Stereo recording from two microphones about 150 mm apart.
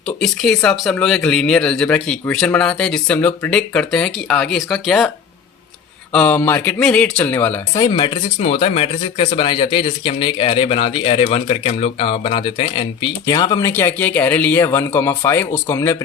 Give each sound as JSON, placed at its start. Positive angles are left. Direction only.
{"t": 0.2, "sound": "speech", "side_deg": 5}
{"t": 6.1, "sound": "speech", "side_deg": 15}
{"t": 7.8, "sound": "speech", "side_deg": 30}
{"t": 13.2, "sound": "speech", "side_deg": 25}